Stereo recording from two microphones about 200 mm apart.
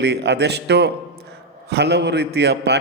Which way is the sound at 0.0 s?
55° right (ahead or behind).